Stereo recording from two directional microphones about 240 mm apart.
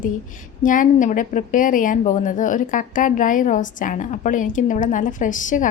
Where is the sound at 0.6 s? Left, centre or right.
Left.